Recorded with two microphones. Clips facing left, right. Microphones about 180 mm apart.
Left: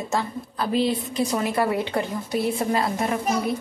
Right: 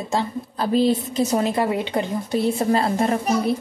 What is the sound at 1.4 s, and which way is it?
A woman's voice, 20° right (ahead or behind).